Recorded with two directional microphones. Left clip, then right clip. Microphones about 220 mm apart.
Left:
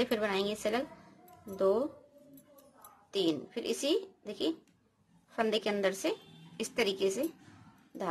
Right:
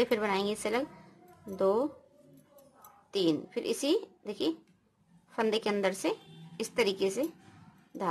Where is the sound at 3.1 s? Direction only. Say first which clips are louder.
Right 2 dB; 15° right (ahead or behind).